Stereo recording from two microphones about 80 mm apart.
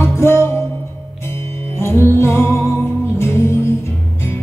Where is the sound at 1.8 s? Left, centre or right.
Left.